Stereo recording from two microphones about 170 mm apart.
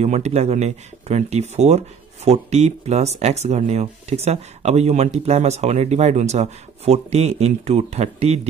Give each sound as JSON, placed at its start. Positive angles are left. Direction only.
{"t": 0.0, "sound": "speech", "side_deg": -40}